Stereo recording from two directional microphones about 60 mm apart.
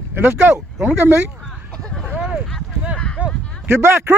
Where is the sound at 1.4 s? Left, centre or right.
Centre.